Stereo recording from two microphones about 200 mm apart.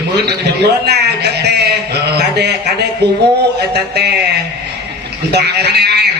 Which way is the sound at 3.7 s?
55° right (ahead or behind).